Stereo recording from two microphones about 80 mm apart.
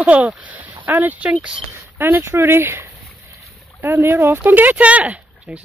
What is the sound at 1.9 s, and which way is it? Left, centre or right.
Speech, right.